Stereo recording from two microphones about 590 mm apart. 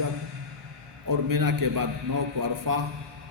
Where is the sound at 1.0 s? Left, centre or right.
Right.